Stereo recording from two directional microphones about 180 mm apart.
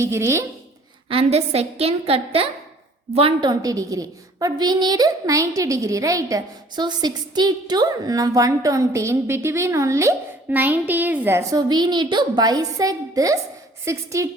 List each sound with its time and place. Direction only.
0.0 s speech: 15° right (ahead or behind)
1.1 s a woman's voice: 35° right (ahead or behind); by 14.3 s 15° right (ahead or behind)